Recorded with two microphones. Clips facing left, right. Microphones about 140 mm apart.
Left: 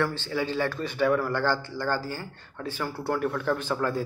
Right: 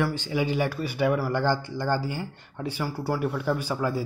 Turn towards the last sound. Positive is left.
turn(degrees=-10)  # may be behind; listen again after turning